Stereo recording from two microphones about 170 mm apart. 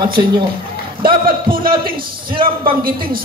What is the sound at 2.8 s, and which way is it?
Speech, 60° right (ahead or behind).